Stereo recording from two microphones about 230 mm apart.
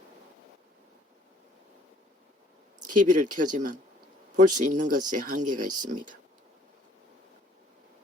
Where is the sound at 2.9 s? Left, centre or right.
Right.